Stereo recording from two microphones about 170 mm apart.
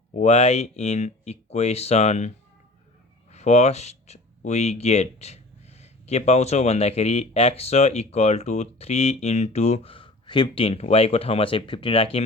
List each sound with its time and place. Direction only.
0.1 s speech: 40° left (ahead or behind)
3.3 s speech: 40° left (ahead or behind)